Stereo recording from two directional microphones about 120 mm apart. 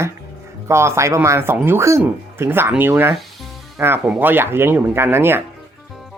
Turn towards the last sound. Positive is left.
turn(degrees=-20)  # may be behind; listen again after turning